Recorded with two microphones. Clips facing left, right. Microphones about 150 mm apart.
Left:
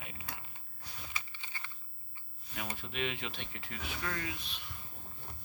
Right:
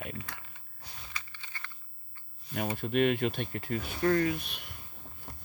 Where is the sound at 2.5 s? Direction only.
50° right (ahead or behind).